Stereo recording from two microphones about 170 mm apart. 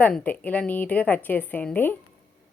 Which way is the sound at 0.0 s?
10° left (ahead or behind).